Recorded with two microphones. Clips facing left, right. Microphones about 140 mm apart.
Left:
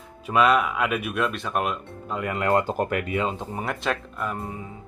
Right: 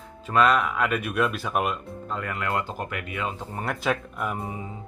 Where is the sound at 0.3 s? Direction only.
5° left (ahead or behind).